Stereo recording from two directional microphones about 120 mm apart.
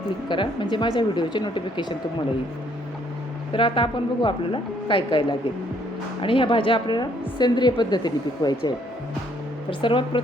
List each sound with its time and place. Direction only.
0.3 s a woman's voice: 40° left (ahead or behind)
3.5 s a woman's voice: 45° left (ahead or behind)
9.6 s a woman's voice: 45° left (ahead or behind)